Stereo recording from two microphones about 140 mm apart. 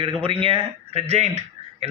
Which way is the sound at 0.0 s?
40° right (ahead or behind).